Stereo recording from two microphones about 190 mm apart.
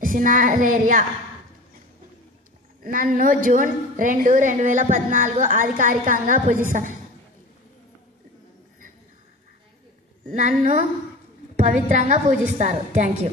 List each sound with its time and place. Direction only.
0.0 s a woman's voice: 45° right (ahead or behind)
2.8 s a woman's voice: 45° right (ahead or behind)
10.3 s a woman's voice: 40° right (ahead or behind)